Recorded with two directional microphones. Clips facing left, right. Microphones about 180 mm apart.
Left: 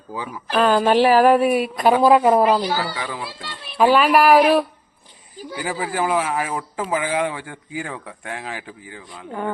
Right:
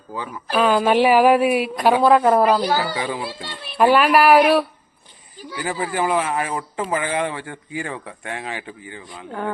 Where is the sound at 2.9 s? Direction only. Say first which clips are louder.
Right 4 dB; 20° right (ahead or behind).